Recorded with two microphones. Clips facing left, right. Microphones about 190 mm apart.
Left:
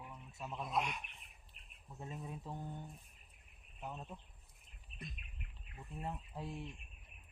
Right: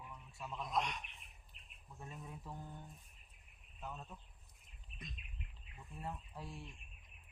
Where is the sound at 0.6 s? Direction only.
5° left (ahead or behind).